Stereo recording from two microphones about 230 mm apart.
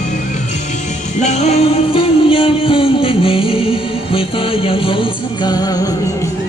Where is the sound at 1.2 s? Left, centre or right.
Left.